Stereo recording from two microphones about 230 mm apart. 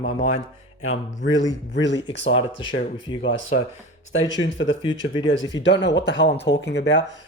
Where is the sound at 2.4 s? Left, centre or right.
Left.